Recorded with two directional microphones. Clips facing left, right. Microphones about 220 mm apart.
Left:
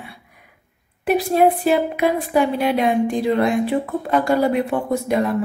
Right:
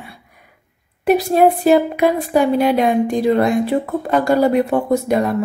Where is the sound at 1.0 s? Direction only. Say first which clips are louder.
Right 3 dB; 40° right (ahead or behind).